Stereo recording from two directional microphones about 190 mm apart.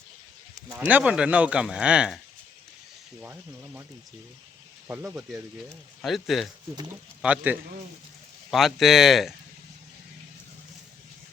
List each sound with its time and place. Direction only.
0.7 s speech: 10° right (ahead or behind)
3.2 s speech: 10° right (ahead or behind)
4.9 s speech: 5° right (ahead or behind)